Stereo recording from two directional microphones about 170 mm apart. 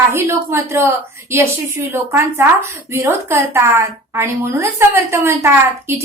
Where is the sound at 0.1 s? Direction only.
15° right (ahead or behind).